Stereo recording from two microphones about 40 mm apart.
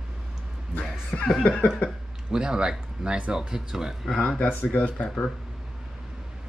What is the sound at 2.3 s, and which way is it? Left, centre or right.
Speech, centre.